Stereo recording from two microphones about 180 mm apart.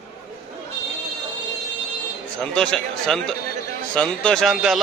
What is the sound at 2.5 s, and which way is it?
Speech, 5° left (ahead or behind).